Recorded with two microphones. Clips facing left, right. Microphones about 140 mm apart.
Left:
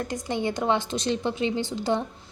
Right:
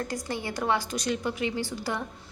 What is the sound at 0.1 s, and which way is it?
A woman's voice, 20° left (ahead or behind).